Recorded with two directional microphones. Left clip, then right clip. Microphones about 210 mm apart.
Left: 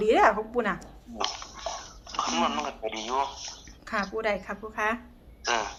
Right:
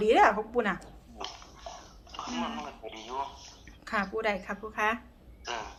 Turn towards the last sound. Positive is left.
turn(degrees=50)  # may be behind; listen again after turning